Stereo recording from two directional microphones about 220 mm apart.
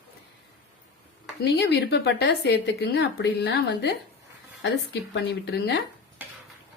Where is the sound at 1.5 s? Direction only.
50° left (ahead or behind).